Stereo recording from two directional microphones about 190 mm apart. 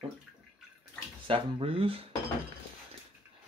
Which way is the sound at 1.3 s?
30° right (ahead or behind).